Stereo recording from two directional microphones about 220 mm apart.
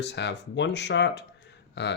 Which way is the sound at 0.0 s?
50° left (ahead or behind).